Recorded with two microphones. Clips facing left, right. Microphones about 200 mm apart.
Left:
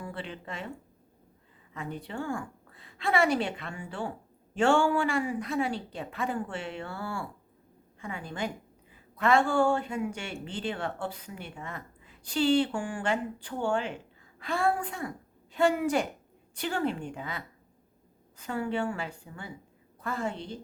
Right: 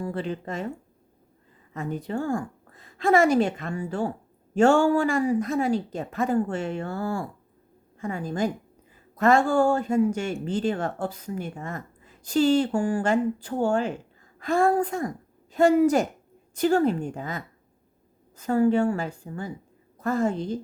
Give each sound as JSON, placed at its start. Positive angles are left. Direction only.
{"t": 0.0, "sound": "a woman's voice", "side_deg": -40}
{"t": 1.7, "sound": "a woman's voice", "side_deg": -45}